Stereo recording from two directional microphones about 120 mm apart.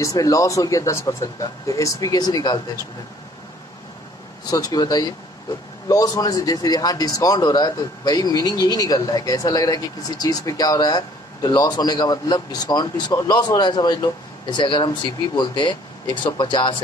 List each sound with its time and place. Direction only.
0.0 s speech: 30° left (ahead or behind)
4.5 s a man's voice: 30° left (ahead or behind)